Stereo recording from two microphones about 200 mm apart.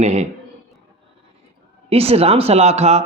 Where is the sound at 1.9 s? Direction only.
30° right (ahead or behind).